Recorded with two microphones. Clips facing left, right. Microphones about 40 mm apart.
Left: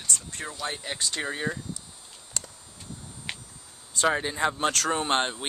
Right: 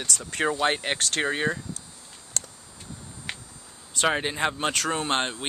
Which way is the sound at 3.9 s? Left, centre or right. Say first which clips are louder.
Right 1 dB; right.